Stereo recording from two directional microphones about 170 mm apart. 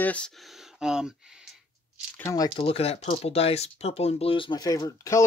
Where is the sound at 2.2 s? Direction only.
20° left (ahead or behind).